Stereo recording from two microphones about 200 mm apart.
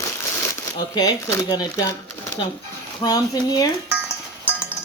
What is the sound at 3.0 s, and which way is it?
Speech, 20° left (ahead or behind).